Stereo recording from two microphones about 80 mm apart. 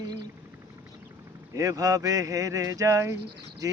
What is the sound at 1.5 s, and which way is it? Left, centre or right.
Speech, right.